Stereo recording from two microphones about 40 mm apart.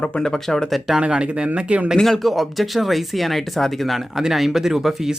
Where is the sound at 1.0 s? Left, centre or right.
Right.